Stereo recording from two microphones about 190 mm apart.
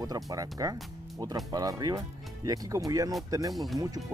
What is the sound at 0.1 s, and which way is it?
Speech, 20° right (ahead or behind).